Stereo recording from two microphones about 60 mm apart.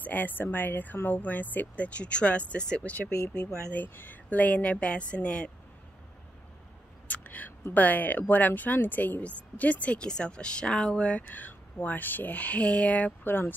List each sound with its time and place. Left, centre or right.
0.0 s speech: left
3.7 s speech: left
7.1 s whispering: left
7.7 s speech: left
11.2 s speech: left
13.2 s speech: left